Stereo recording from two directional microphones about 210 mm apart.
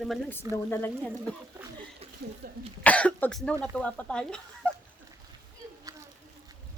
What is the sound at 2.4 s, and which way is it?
Speech, 45° right (ahead or behind).